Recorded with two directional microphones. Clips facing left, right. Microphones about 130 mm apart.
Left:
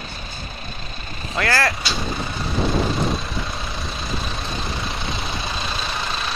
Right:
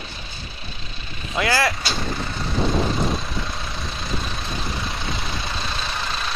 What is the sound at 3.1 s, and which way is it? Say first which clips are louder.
Vehicle: left 1 dB; centre (ahead or behind).